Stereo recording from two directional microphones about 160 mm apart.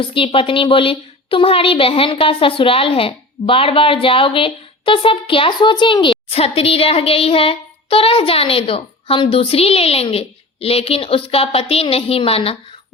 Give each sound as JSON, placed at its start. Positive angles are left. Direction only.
{"t": 0.0, "sound": "a woman's voice", "side_deg": 35}